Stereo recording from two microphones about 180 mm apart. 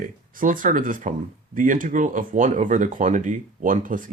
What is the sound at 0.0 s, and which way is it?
Speech, 50° right (ahead or behind).